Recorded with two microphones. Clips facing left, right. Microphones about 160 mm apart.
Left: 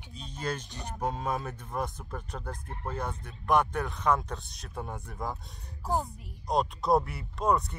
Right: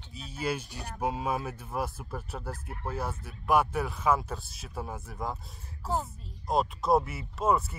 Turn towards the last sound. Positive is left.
turn(degrees=-5)  # may be behind; listen again after turning